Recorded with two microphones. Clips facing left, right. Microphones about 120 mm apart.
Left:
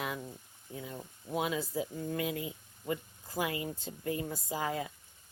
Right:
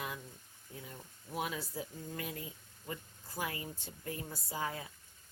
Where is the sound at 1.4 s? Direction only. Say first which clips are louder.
Left 6 dB; 90° left.